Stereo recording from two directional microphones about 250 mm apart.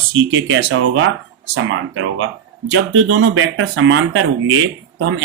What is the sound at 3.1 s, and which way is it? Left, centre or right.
Speech, right.